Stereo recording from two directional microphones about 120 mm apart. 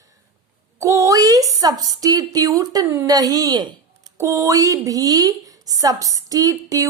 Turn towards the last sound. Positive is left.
turn(degrees=-30)  # may be behind; listen again after turning